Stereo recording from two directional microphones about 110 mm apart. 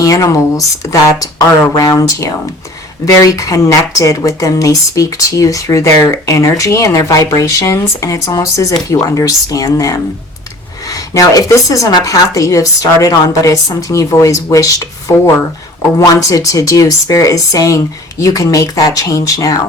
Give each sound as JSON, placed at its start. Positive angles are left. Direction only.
{"t": 0.0, "sound": "speech", "side_deg": 30}